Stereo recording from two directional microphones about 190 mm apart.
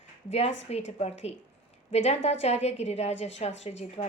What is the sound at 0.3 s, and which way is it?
Speech, 35° left (ahead or behind).